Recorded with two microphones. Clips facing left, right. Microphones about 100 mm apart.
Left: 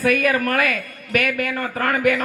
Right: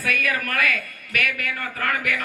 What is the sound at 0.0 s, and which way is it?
A man's voice, 35° left (ahead or behind).